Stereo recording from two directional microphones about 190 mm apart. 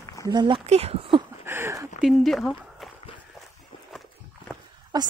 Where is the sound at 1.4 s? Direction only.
10° right (ahead or behind).